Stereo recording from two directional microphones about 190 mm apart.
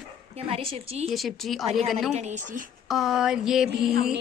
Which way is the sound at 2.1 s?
40° right (ahead or behind).